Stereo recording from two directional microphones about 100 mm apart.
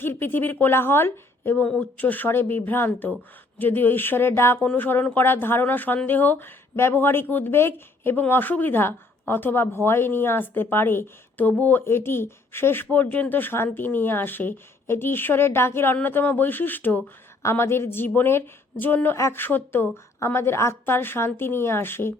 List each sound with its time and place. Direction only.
0.0 s speech: 20° left (ahead or behind)
1.6 s speech: 10° left (ahead or behind)
4.5 s speech: 15° left (ahead or behind)